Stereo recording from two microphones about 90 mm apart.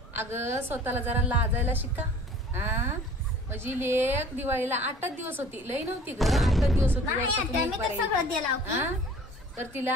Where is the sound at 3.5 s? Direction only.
25° right (ahead or behind).